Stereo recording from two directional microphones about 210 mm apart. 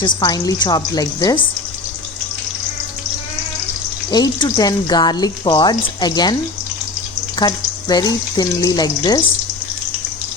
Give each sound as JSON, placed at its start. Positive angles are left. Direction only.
{"t": 0.0, "sound": "speech", "side_deg": 20}
{"t": 4.1, "sound": "speech", "side_deg": 20}
{"t": 7.3, "sound": "speech", "side_deg": 20}